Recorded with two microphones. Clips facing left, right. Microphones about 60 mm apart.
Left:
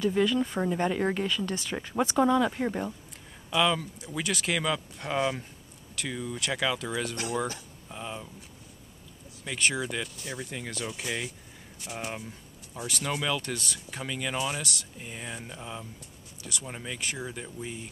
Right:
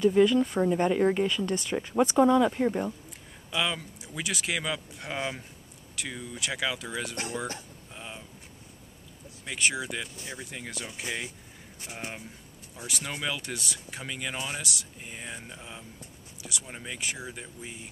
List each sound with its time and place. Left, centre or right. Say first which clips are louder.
0.2 s speech: right 5 dB; centre
0.5 s speech: right 3 dB; centre
1.1 s speech: right 3 dB; centre
2.0 s speech: right 2 dB; centre
9.4 s speech: left 1 dB; centre
11.8 s speech: left 3 dB; right
12.8 s speech: left 3 dB; centre
16.3 s a sound: left 1 dB; centre
16.6 s speech: left 1 dB; centre